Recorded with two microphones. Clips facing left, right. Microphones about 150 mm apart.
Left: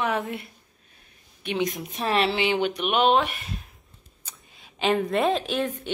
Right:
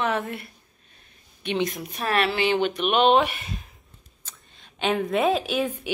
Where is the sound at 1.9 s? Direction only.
25° left (ahead or behind); by 5.9 s 5° right (ahead or behind).